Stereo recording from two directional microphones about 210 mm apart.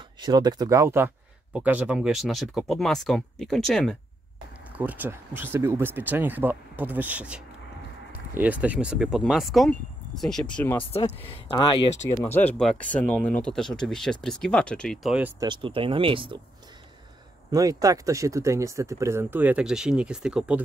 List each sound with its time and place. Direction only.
0.2 s speech: 20° right (ahead or behind); by 10.9 s 10° left (ahead or behind)
10.9 s speech: 30° left (ahead or behind)
12.4 s speech: 5° left (ahead or behind)
15.4 s speech: 25° right (ahead or behind)
17.5 s speech: 15° right (ahead or behind)